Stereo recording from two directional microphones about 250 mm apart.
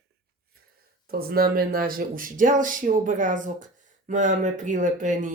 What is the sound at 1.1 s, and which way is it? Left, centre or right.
Speech, right.